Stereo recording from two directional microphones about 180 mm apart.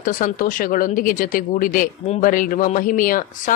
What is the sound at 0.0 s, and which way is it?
Speech, 50° left (ahead or behind).